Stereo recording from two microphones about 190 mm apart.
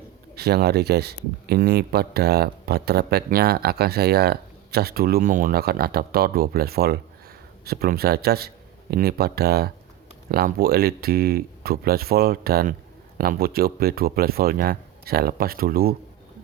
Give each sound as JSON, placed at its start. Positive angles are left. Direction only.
{"t": 0.3, "sound": "speech", "side_deg": -55}